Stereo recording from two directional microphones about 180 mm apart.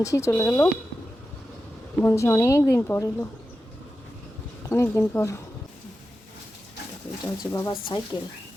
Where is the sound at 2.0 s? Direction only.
15° left (ahead or behind).